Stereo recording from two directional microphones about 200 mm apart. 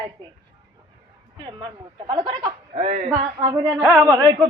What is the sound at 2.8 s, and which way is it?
Speech, 40° right (ahead or behind).